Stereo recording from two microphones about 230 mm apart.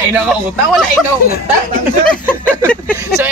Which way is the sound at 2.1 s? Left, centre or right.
Centre.